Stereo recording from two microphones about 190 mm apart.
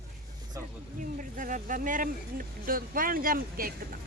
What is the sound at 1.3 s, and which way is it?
A man's voice, 45° right (ahead or behind).